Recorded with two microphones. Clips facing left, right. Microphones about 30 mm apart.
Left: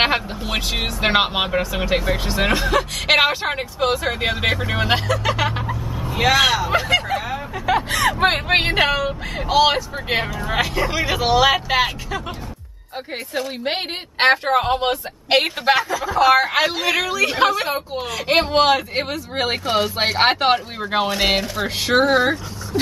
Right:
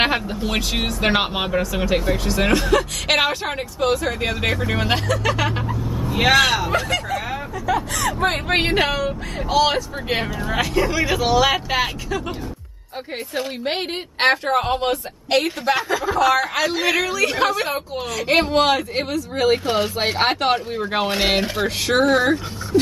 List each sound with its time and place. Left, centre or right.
0.0 s speech: centre
6.1 s speech: centre
6.7 s speech: left
7.6 s speech: left
8.5 s speech: centre
13.7 s speech: centre
15.3 s speech: left
16.7 s speech: centre
19.1 s speech: left
20.8 s speech: centre
21.9 s speech: centre